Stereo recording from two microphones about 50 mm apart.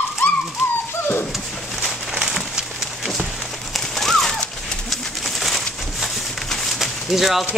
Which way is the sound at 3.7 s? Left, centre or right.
Centre.